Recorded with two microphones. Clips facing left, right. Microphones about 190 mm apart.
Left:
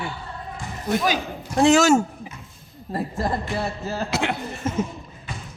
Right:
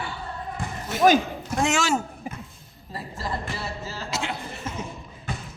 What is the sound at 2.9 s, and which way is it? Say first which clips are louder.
A man's voice: left 7 dB; 55° left (ahead or behind).